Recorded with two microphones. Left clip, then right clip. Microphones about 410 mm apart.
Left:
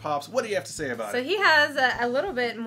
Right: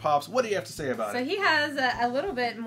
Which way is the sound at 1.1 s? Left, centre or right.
Left.